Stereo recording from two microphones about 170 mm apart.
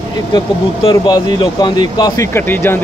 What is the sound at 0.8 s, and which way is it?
Speech, 25° left (ahead or behind).